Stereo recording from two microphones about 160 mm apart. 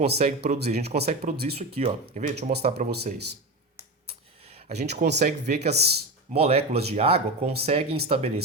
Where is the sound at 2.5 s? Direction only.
70° right (ahead or behind).